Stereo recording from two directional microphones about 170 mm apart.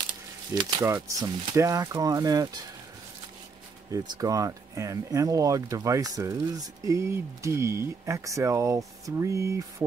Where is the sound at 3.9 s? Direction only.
25° right (ahead or behind).